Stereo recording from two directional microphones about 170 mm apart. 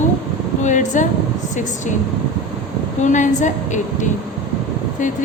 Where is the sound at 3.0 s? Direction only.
45° left (ahead or behind).